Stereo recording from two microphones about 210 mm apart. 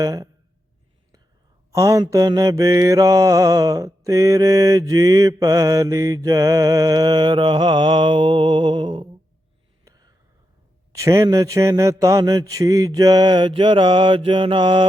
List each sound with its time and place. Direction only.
0.0 s mantra: 15° right (ahead or behind)
1.7 s mantra: 15° right (ahead or behind)
9.8 s whispering: 20° right (ahead or behind)
10.9 s mantra: 15° right (ahead or behind)